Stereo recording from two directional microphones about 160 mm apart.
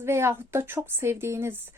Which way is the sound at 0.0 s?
15° right (ahead or behind).